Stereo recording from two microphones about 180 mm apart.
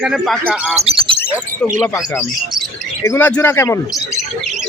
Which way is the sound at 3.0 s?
15° left (ahead or behind).